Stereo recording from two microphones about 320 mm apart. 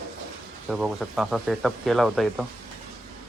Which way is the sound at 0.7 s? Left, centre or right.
Centre.